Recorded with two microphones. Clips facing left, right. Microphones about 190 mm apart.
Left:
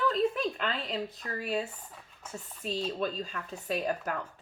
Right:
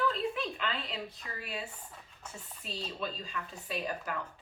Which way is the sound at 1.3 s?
40° left (ahead or behind).